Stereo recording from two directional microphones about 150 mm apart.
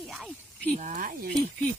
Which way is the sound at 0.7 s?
60° right (ahead or behind).